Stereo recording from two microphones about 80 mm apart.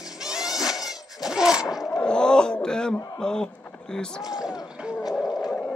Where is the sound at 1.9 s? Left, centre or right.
Centre.